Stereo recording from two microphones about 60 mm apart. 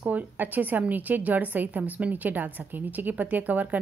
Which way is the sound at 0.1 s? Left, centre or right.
Right.